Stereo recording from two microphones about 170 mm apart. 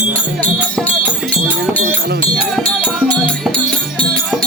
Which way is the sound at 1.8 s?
65° right (ahead or behind).